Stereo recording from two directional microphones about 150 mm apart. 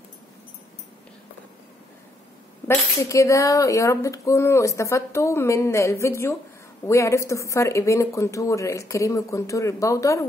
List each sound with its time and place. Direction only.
2.7 s speech: 20° left (ahead or behind)